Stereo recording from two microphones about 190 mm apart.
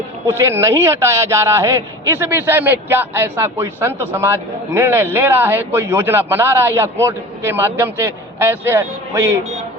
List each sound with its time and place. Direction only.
0.3 s a man's voice: 15° right (ahead or behind)